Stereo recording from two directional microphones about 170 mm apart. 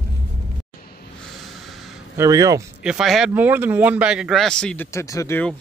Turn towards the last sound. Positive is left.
turn(degrees=15)  # may be behind; listen again after turning